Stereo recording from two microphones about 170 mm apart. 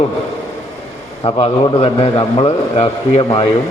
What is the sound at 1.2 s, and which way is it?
A man's voice, 35° left (ahead or behind).